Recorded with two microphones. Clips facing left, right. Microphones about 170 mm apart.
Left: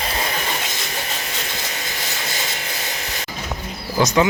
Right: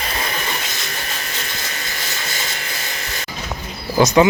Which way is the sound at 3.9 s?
35° right (ahead or behind).